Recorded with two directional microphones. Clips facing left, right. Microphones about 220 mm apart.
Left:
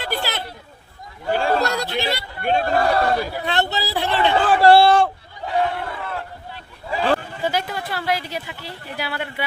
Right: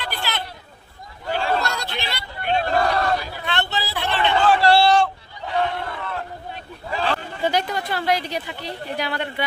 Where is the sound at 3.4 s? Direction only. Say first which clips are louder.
Left 3 dB; 40° left (ahead or behind).